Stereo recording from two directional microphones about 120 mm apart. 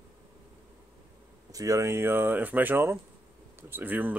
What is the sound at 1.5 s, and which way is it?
Speech, 30° right (ahead or behind).